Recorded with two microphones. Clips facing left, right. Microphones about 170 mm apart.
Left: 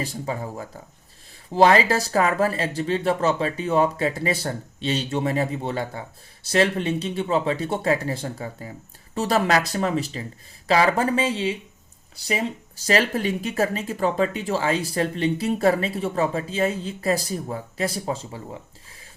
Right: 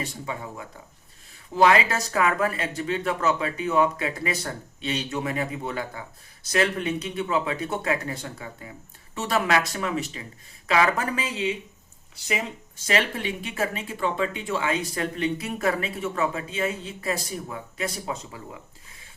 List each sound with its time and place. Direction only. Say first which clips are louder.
0.0 s speech: left 4 dB; 35° left (ahead or behind)